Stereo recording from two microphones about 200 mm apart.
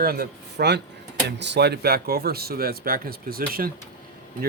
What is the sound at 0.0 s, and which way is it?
Speech, 50° right (ahead or behind).